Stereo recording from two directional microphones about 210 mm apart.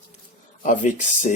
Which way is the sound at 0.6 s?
35° left (ahead or behind).